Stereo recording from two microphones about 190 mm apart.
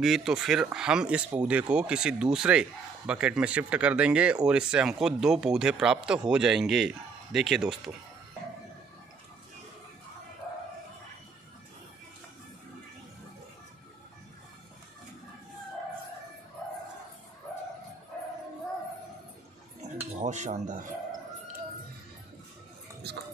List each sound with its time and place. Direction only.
0.0 s speech: centre (ahead or behind)
19.8 s cutlery: 35° right (ahead or behind)